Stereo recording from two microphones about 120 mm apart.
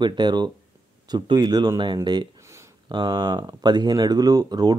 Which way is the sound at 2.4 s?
25° right (ahead or behind).